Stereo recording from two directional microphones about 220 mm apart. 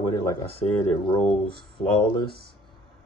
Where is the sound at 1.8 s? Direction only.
20° left (ahead or behind).